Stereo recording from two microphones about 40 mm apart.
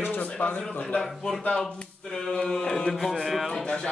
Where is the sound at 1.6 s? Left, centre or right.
Centre.